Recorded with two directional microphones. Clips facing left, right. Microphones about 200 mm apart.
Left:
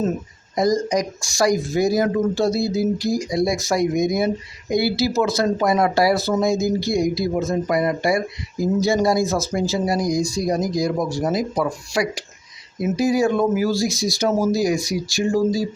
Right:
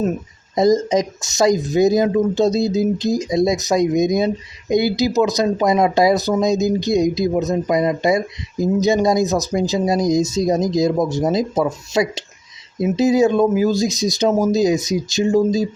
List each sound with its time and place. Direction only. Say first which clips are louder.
0.5 s speech: right 4 dB; 25° right (ahead or behind)